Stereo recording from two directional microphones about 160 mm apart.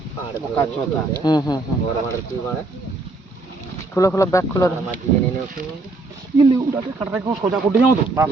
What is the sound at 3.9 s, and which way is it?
Speech, 15° left (ahead or behind).